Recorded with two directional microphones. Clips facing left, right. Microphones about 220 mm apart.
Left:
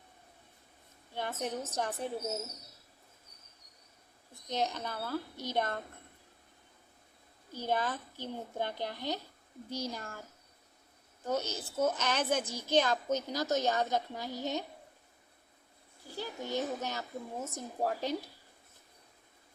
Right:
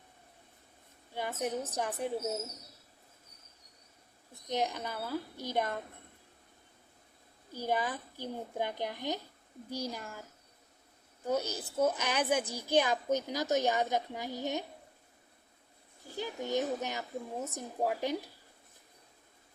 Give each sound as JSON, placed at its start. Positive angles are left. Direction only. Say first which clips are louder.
{"t": 1.1, "sound": "a woman's voice", "louder": "right 2 dB", "side_deg": -10}
{"t": 4.4, "sound": "a woman's voice", "louder": "right 1 dB", "side_deg": -15}
{"t": 7.5, "sound": "a woman's voice", "louder": "even", "side_deg": -10}
{"t": 11.3, "sound": "a woman's voice", "louder": "right 1 dB", "side_deg": -10}
{"t": 16.1, "sound": "a woman's voice", "louder": "right 3 dB", "side_deg": -15}